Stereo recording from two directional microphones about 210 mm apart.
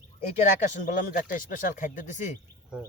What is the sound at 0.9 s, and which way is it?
Speech, 40° left (ahead or behind).